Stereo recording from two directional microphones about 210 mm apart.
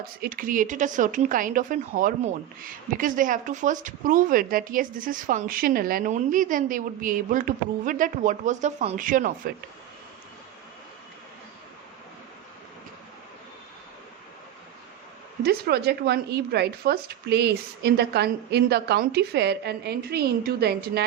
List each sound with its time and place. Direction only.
0.0 s speech: 45° right (ahead or behind)
15.4 s a woman's voice: 50° right (ahead or behind)